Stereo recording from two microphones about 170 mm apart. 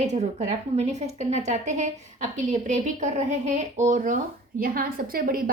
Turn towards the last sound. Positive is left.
turn(degrees=-60)  # may be behind; listen again after turning